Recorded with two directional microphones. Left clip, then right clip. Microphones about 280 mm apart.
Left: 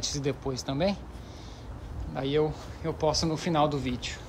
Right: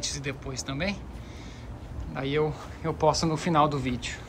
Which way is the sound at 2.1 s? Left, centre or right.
Centre.